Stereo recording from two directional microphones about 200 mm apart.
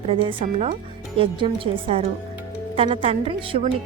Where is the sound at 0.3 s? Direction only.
35° right (ahead or behind).